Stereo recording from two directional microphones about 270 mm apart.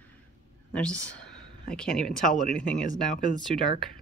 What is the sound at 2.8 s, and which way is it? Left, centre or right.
Speech, left.